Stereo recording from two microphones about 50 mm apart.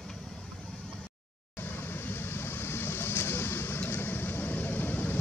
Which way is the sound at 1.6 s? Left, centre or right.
Left.